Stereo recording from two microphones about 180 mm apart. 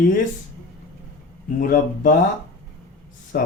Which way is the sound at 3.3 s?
55° left (ahead or behind).